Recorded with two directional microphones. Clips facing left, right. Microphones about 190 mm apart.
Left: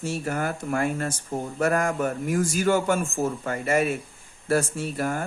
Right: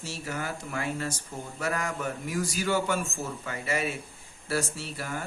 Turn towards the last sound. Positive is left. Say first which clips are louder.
# left 8 dB
turn(degrees=50)  # may be behind; listen again after turning